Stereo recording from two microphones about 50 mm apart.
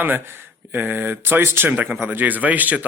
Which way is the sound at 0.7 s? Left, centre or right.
Right.